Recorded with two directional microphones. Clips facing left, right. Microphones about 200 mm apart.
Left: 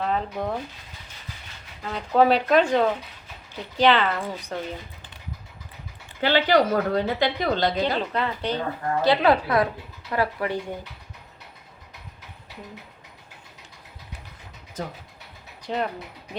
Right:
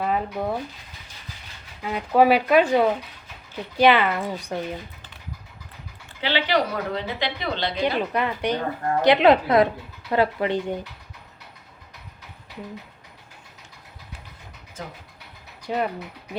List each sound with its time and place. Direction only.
0.0 s speech: 10° right (ahead or behind)
1.8 s speech: 10° right (ahead or behind)
6.2 s a woman's voice: 45° left (ahead or behind)
7.9 s speech: 15° right (ahead or behind)
15.6 s speech: 10° right (ahead or behind)